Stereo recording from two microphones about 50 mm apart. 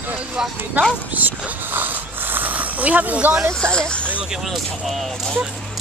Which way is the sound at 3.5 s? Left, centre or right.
Centre.